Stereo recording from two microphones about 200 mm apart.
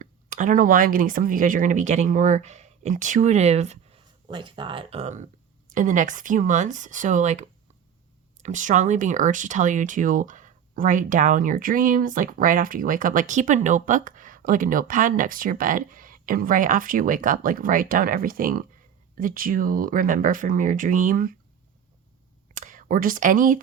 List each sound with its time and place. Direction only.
0.0 s speech: 40° right (ahead or behind)
22.5 s speech: 40° right (ahead or behind)